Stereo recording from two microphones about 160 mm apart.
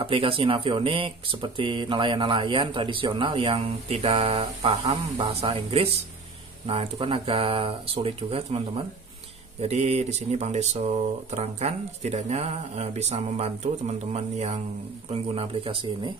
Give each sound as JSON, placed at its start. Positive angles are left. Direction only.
{"t": 0.0, "sound": "speech", "side_deg": -35}